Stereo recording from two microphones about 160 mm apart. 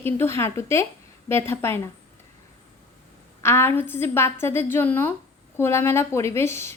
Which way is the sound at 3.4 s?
15° left (ahead or behind).